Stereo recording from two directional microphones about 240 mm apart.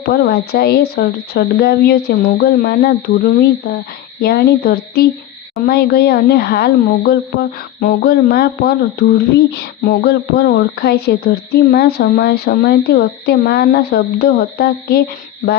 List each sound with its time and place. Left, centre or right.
0.0 s a woman's voice: left